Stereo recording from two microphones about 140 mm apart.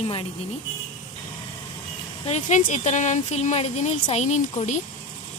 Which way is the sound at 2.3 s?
60° left (ahead or behind).